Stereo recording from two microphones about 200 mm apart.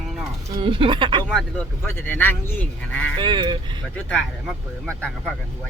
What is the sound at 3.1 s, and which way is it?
Vehicle, 25° right (ahead or behind).